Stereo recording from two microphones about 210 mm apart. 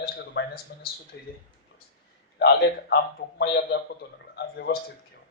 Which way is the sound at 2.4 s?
55° left (ahead or behind).